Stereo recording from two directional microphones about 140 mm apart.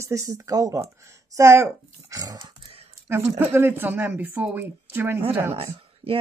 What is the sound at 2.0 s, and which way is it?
Dog, 25° right (ahead or behind).